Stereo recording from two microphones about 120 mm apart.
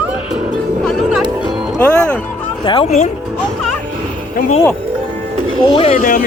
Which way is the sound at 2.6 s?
40° left (ahead or behind).